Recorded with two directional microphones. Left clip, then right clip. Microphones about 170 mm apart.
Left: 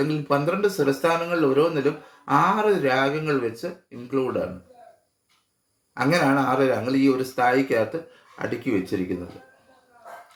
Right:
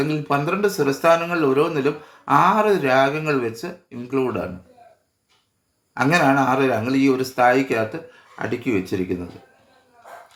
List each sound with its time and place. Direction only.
0.0 s speech: 25° right (ahead or behind)
5.9 s speech: 25° right (ahead or behind)